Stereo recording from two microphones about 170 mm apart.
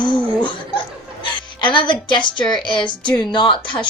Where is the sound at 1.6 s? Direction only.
30° left (ahead or behind).